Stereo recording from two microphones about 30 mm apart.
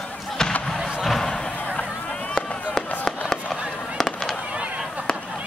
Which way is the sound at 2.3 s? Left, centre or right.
Centre.